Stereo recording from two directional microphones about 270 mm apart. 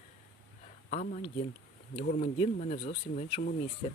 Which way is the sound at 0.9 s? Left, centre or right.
Left.